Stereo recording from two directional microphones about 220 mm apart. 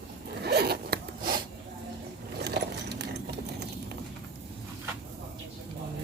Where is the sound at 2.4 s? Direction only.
45° right (ahead or behind).